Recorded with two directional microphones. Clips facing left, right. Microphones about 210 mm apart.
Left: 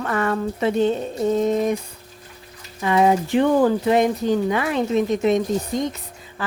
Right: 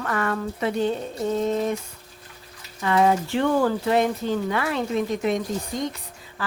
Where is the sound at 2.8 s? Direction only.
15° left (ahead or behind).